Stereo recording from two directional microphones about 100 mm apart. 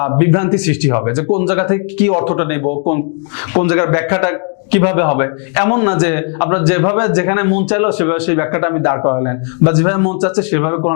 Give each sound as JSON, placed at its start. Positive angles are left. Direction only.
{"t": 0.0, "sound": "a man's voice", "side_deg": 20}